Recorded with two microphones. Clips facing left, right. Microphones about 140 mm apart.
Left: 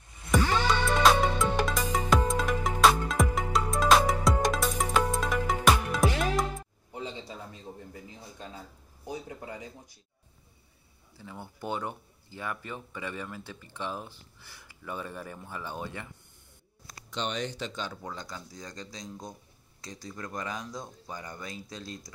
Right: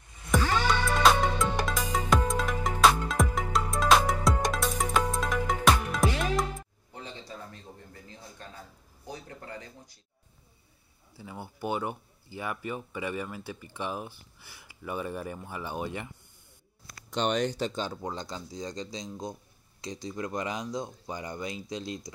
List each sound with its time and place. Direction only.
0.3 s music: centre (ahead or behind)
6.9 s a sound: 15° left (ahead or behind)
11.1 s speech: 10° right (ahead or behind)
17.1 s speech: 50° right (ahead or behind); by 22.1 s 20° right (ahead or behind)